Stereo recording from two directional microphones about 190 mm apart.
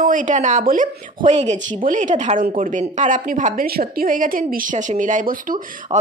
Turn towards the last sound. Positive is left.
turn(degrees=-45)  # may be behind; listen again after turning